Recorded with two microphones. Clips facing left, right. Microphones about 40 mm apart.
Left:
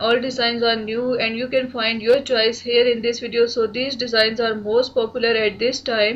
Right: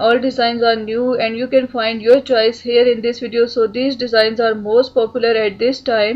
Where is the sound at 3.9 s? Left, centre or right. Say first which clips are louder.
Right 5 dB; centre.